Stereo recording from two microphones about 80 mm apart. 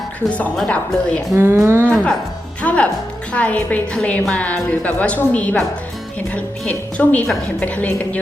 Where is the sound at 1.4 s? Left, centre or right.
Right.